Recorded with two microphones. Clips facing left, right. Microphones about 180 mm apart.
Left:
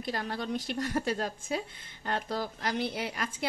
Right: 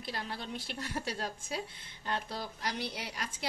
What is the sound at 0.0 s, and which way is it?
A woman's voice, 50° left (ahead or behind).